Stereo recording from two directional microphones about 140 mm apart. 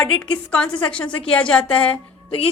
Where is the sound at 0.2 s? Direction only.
10° left (ahead or behind).